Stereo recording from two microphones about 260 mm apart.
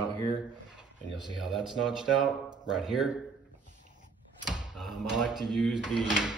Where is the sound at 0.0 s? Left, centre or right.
Centre.